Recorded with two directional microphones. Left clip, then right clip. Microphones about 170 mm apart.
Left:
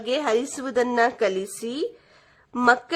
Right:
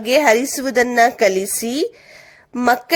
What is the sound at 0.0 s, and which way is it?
A woman's voice, 25° right (ahead or behind).